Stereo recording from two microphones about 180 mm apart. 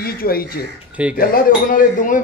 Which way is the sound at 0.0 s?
55° left (ahead or behind).